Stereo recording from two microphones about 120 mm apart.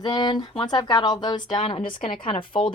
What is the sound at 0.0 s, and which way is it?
Speech, 35° left (ahead or behind).